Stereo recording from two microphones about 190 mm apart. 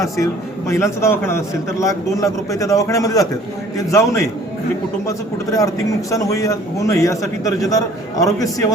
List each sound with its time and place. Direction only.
0.7 s a man's voice: 15° left (ahead or behind)